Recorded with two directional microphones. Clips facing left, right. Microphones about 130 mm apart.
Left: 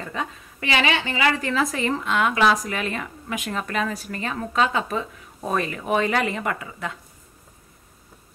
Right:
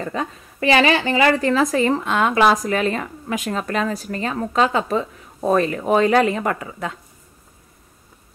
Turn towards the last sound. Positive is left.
turn(degrees=-40)  # may be behind; listen again after turning